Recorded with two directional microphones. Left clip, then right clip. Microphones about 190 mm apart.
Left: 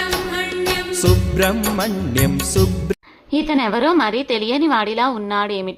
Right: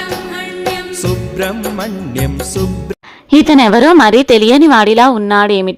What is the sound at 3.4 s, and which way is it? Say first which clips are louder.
A woman's voice: right 9 dB; 50° right (ahead or behind).